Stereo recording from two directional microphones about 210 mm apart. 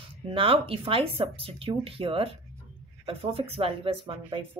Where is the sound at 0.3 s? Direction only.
25° right (ahead or behind).